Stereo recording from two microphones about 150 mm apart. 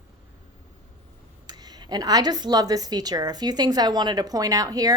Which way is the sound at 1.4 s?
25° right (ahead or behind).